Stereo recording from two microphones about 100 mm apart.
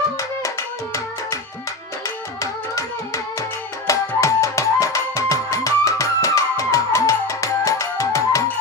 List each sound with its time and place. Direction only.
0.2 s music: 30° left (ahead or behind)